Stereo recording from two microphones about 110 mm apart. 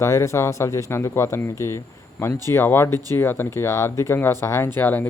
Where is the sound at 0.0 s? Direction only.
25° left (ahead or behind).